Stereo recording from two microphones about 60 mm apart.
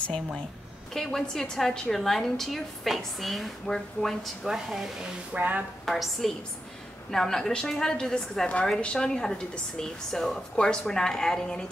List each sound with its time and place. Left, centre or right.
0.9 s a woman's voice: centre
5.3 s speech: right
5.9 s a woman's voice: centre